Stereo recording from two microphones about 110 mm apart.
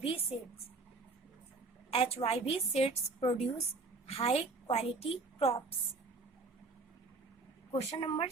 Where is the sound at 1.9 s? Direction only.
60° left (ahead or behind).